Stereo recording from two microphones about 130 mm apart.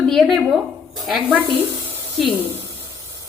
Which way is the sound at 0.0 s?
Centre (ahead or behind).